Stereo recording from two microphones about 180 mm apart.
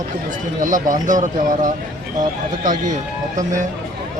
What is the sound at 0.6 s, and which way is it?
Speech, 45° right (ahead or behind).